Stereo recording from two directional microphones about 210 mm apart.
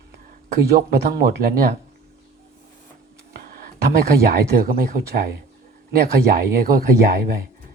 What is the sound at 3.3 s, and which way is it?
Speech, 45° right (ahead or behind).